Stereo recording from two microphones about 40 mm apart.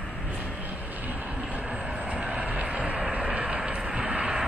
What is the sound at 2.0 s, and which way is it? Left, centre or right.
Vehicle, right.